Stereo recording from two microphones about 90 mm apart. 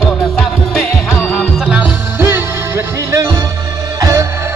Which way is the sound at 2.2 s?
30° right (ahead or behind).